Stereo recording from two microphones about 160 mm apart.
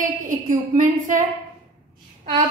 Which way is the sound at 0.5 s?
50° right (ahead or behind).